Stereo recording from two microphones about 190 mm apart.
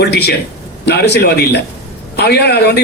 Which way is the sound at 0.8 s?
60° left (ahead or behind).